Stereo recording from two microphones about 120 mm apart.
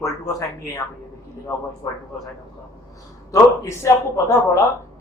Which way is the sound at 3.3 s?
25° left (ahead or behind).